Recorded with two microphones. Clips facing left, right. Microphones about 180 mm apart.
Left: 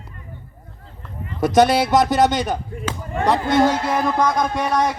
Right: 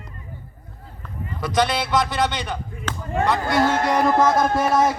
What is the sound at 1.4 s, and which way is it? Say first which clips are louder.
Speech: left 7 dB; 45° left (ahead or behind).